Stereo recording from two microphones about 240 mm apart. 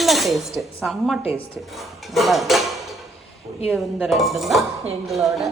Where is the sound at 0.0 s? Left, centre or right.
Centre.